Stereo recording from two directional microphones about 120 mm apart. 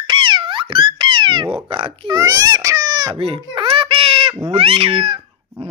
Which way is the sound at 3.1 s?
50° right (ahead or behind).